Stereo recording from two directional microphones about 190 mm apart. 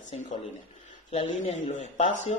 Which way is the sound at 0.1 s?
35° left (ahead or behind).